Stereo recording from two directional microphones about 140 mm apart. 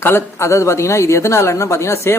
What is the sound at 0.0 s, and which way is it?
Speech, 20° left (ahead or behind).